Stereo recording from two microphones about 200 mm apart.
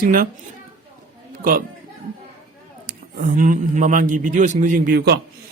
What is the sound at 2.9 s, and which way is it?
Speech, 45° right (ahead or behind).